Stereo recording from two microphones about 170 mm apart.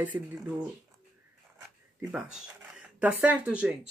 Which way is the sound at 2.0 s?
5° right (ahead or behind).